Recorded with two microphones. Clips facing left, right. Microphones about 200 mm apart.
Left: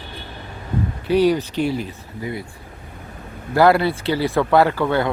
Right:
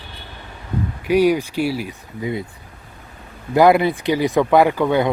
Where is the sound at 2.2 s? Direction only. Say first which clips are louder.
Right 4 dB; 20° right (ahead or behind).